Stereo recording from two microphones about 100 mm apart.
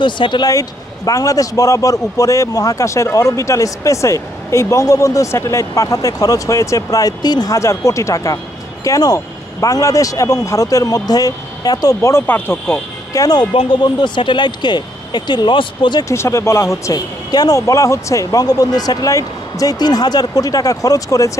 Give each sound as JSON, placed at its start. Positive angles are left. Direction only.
{"t": 0.0, "sound": "speech", "side_deg": 50}
{"t": 0.5, "sound": "a man's voice", "side_deg": 35}
{"t": 13.1, "sound": "speech", "side_deg": 40}
{"t": 16.0, "sound": "a man's voice", "side_deg": 30}